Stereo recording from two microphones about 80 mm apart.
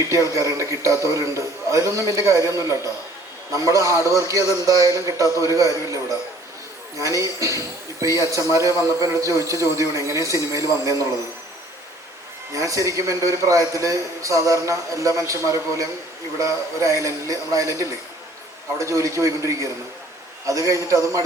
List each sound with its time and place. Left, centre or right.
0.1 s a man's voice: right
12.5 s a man's voice: right
16.4 s a man's voice: right